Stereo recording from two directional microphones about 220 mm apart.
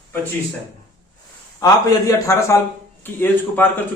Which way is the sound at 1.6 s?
15° left (ahead or behind).